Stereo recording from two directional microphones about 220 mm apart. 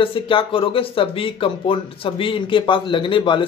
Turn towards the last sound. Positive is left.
turn(degrees=20)  # may be behind; listen again after turning